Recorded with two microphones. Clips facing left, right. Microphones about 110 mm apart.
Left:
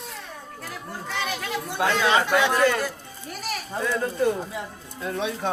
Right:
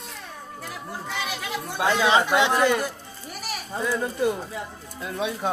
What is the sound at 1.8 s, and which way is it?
A man's voice, 20° right (ahead or behind).